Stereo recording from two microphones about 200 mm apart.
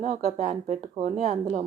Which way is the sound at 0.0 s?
40° right (ahead or behind).